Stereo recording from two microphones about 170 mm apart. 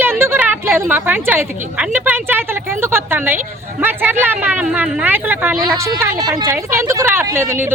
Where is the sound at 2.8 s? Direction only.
15° right (ahead or behind).